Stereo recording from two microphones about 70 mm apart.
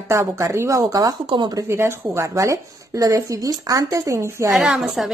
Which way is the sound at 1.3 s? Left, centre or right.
Right.